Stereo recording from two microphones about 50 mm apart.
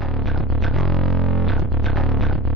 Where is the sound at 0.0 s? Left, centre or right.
Centre.